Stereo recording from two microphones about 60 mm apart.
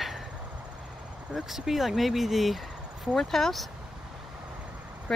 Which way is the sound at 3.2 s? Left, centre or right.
Centre.